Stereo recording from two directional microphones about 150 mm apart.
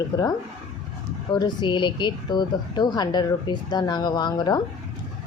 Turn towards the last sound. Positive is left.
turn(degrees=30)  # may be behind; listen again after turning